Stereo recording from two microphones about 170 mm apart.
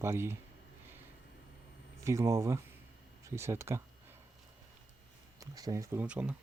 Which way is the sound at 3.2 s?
15° right (ahead or behind).